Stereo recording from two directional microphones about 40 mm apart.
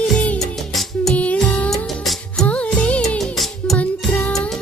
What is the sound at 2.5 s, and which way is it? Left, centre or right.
Music, left.